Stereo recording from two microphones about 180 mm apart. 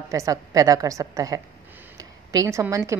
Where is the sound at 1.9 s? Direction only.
20° right (ahead or behind).